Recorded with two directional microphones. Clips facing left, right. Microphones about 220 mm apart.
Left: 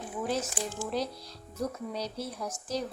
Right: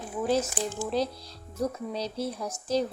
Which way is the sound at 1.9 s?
30° right (ahead or behind).